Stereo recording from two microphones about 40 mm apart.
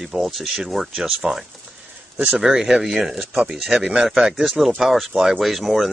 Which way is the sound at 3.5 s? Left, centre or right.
Centre.